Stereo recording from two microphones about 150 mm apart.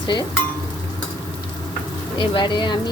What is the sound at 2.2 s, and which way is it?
Frying, 30° left (ahead or behind).